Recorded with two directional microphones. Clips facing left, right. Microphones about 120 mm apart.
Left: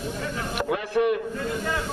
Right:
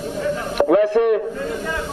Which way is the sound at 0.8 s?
65° right (ahead or behind).